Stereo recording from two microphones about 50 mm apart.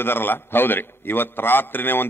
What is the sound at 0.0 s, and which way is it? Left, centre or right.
A man's voice, left.